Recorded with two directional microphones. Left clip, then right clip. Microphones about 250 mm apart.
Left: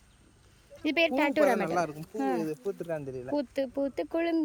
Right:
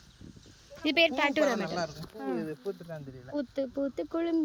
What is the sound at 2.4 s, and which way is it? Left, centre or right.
Speech, left.